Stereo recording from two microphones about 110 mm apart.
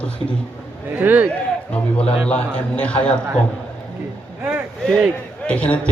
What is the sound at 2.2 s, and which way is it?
Speech, 10° left (ahead or behind).